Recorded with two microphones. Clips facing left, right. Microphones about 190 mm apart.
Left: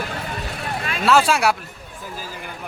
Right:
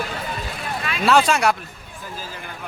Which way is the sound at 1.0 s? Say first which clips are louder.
Even; 5° left (ahead or behind).